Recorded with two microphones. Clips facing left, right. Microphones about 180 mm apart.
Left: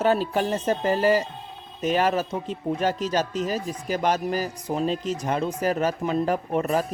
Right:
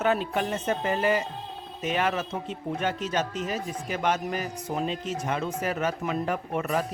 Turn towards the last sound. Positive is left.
turn(degrees=35)  # may be behind; listen again after turning